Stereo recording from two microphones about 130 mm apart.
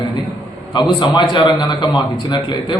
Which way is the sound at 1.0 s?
35° left (ahead or behind).